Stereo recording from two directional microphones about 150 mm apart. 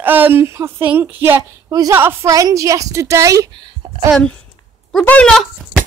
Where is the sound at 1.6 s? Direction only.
25° right (ahead or behind).